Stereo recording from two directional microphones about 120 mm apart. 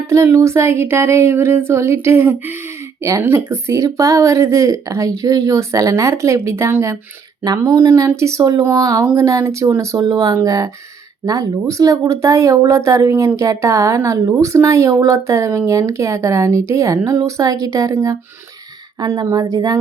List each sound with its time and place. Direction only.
0.1 s speech: 25° right (ahead or behind)
7.4 s speech: 35° right (ahead or behind)
7.8 s speech: 20° right (ahead or behind)